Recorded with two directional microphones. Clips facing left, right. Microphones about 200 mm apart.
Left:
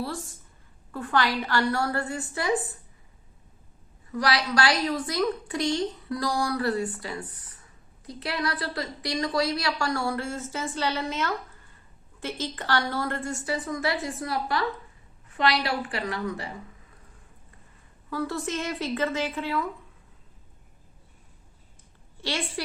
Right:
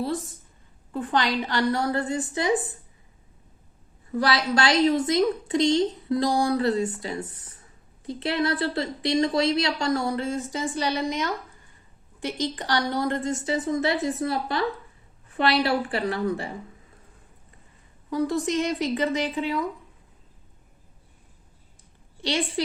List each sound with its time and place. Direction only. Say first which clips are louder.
0.0 s a woman's voice: right 5 dB; 20° right (ahead or behind)
4.1 s a woman's voice: right 2 dB; 30° right (ahead or behind)
18.1 s a woman's voice: right 5 dB; 15° right (ahead or behind)
22.2 s a woman's voice: right 5 dB; 20° right (ahead or behind)